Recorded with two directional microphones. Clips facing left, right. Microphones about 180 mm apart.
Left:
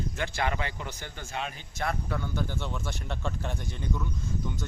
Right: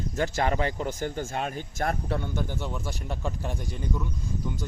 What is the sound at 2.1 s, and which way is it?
Speech, 25° right (ahead or behind).